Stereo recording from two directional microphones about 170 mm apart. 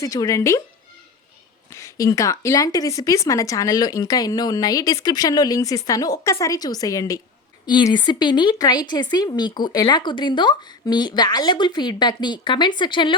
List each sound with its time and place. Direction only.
0.0 s speech: 20° left (ahead or behind)
1.7 s speech: 20° left (ahead or behind)